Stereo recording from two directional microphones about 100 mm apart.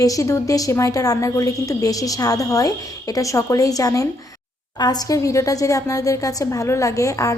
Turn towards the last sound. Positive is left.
turn(degrees=35)  # may be behind; listen again after turning